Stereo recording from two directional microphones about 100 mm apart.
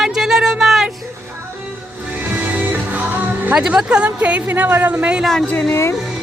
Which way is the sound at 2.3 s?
15° right (ahead or behind).